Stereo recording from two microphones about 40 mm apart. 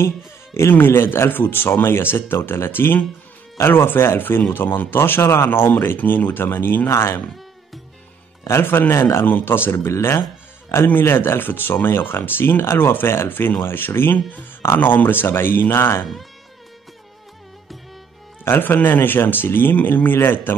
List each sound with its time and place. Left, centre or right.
0.7 s speech: left
4.5 s speech: left
5.9 s speech: left
8.5 s a man's voice: left
9.2 s speech: left
10.9 s speech: left
14.8 s speech: left
18.4 s speech: left